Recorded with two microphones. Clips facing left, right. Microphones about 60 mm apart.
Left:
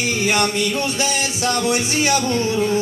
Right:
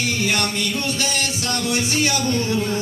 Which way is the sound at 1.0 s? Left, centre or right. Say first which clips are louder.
Left 3 dB; centre.